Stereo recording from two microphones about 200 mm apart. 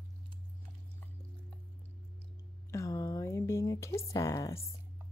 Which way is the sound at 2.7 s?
15° left (ahead or behind).